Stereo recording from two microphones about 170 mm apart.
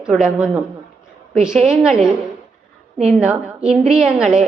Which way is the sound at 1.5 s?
40° right (ahead or behind).